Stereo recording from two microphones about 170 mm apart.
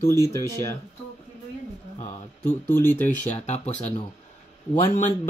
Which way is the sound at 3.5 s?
40° left (ahead or behind).